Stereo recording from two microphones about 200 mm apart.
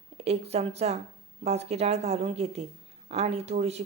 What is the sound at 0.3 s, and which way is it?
Speech, 30° right (ahead or behind).